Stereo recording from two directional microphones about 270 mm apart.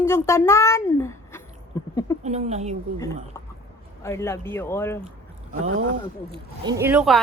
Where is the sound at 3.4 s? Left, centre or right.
Centre.